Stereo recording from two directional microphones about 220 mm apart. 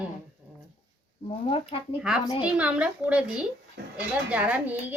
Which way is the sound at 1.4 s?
25° left (ahead or behind).